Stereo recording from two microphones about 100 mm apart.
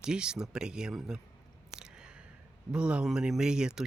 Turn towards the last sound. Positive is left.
turn(degrees=-5)  # may be behind; listen again after turning